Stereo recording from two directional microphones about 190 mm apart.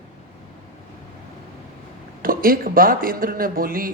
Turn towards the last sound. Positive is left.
turn(degrees=-50)  # may be behind; listen again after turning